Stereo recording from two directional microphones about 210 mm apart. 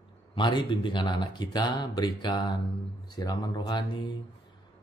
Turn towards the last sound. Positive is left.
turn(degrees=20)  # may be behind; listen again after turning